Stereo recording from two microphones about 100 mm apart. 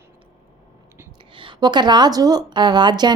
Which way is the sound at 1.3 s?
55° right (ahead or behind).